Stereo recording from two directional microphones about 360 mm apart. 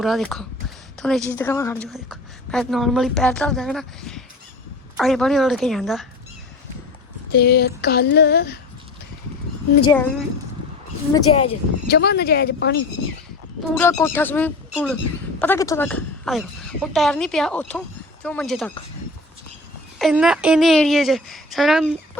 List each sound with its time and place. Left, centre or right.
0.0 s a woman's voice: centre
7.3 s female singing: left
9.8 s a woman's voice: centre
11.1 s a woman's voice: centre
11.9 s female singing: left
13.6 s a woman's voice: centre
20.0 s a woman's voice: centre